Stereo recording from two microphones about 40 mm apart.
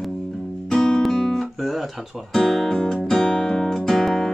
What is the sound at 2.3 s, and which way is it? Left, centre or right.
Speech, centre.